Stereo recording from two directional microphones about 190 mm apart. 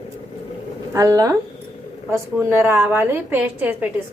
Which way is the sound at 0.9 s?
15° right (ahead or behind).